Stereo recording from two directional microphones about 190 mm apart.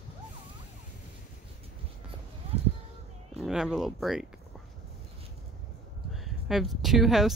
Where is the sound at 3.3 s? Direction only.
5° right (ahead or behind).